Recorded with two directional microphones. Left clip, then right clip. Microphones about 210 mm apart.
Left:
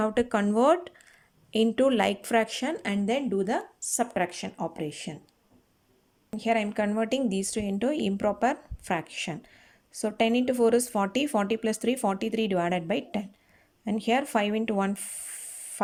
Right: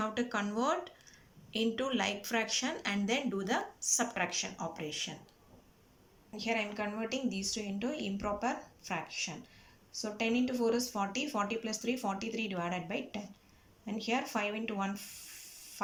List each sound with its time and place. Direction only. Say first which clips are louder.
0.0 s speech: left 9 dB; 40° left (ahead or behind)
6.3 s speech: left 8 dB; 35° left (ahead or behind)